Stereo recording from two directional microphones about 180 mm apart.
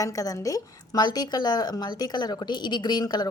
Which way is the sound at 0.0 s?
20° left (ahead or behind).